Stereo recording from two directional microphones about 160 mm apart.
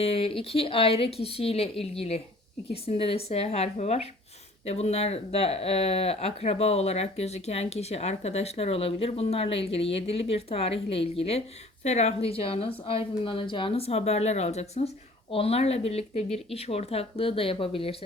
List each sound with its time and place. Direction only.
0.0 s speech: 40° left (ahead or behind)